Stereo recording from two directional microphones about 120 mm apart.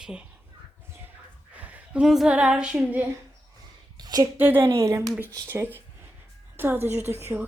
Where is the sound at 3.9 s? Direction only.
35° right (ahead or behind).